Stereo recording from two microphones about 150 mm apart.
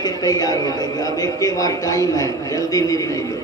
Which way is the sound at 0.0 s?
25° left (ahead or behind).